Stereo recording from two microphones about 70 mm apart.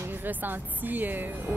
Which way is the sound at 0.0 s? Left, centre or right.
Right.